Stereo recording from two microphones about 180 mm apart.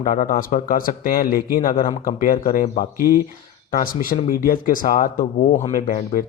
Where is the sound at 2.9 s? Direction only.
15° right (ahead or behind).